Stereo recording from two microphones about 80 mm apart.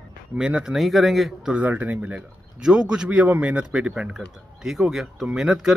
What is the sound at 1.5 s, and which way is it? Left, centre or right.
A man's voice, right.